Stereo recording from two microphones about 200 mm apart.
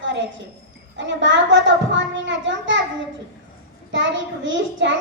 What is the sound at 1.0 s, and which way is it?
A child's voice, 65° right (ahead or behind).